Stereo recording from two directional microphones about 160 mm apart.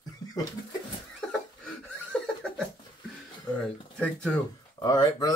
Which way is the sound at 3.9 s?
5° left (ahead or behind).